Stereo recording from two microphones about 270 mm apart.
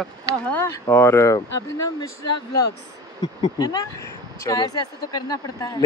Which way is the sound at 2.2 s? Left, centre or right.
Left.